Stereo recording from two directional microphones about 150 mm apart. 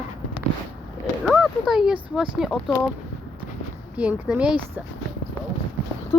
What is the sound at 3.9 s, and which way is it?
Speech, 10° right (ahead or behind).